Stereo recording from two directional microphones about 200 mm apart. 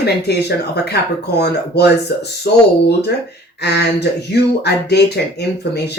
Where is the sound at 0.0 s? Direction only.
55° left (ahead or behind).